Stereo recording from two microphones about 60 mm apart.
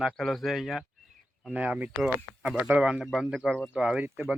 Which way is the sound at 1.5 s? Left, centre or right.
Right.